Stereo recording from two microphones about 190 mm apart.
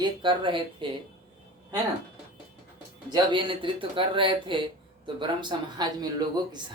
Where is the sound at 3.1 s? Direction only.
25° right (ahead or behind).